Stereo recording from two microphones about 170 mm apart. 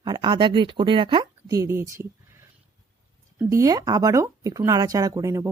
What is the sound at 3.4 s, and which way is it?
A woman's voice, 20° right (ahead or behind).